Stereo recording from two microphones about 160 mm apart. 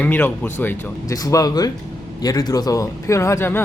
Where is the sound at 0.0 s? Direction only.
10° left (ahead or behind).